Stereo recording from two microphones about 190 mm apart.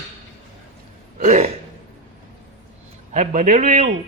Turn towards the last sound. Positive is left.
turn(degrees=-40)  # may be behind; listen again after turning